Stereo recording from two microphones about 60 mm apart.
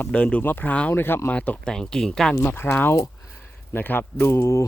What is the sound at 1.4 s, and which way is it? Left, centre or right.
Speech, centre.